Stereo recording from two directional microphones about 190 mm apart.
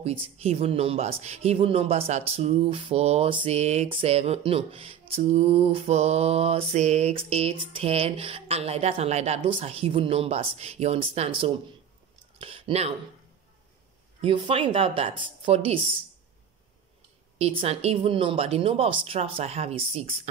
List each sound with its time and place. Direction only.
0.0 s speech: 35° right (ahead or behind)
14.2 s speech: 30° right (ahead or behind)
17.4 s speech: 30° right (ahead or behind)